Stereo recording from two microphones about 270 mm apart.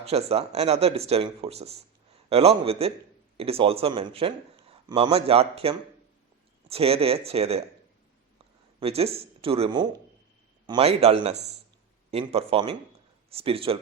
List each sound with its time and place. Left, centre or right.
0.0 s a man's voice: right
8.8 s a man's voice: right